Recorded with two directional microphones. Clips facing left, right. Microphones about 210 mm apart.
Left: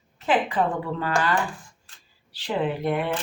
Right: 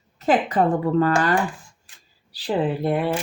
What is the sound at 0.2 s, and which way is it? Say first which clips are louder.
Speech: right 4 dB; 40° right (ahead or behind).